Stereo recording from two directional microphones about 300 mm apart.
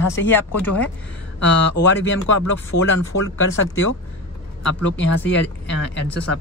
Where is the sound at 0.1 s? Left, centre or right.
Centre.